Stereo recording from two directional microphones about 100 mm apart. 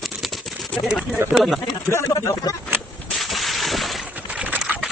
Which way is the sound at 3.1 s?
Centre (ahead or behind).